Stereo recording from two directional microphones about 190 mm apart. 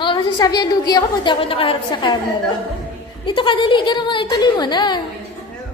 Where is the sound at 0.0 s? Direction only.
25° left (ahead or behind).